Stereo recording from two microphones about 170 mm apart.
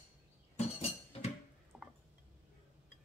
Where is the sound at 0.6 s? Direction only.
40° left (ahead or behind).